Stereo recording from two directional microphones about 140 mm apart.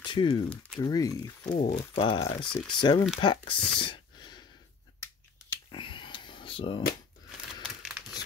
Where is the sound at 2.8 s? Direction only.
35° left (ahead or behind).